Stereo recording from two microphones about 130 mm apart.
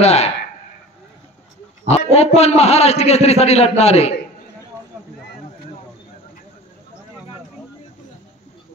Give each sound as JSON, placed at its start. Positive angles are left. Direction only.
{"t": 0.0, "sound": "a man's voice", "side_deg": 55}
{"t": 1.9, "sound": "a man's voice", "side_deg": 55}